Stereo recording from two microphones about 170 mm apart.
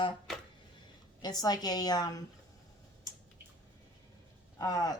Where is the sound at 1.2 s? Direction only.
25° left (ahead or behind).